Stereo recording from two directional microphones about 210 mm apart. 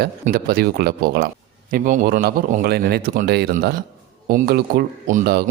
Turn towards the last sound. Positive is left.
turn(degrees=-50)  # may be behind; listen again after turning